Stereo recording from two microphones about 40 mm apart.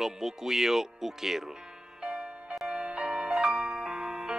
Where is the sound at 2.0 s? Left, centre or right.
Right.